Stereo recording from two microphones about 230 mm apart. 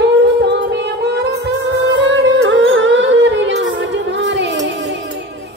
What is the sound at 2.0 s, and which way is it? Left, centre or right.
Music, right.